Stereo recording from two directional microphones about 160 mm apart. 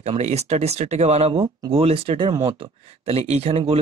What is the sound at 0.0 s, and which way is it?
Speech, 40° right (ahead or behind).